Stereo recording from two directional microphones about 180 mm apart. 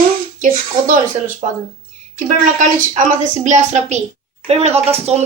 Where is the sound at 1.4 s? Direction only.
35° right (ahead or behind).